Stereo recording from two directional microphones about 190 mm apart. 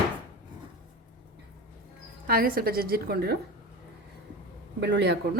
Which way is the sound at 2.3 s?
50° right (ahead or behind).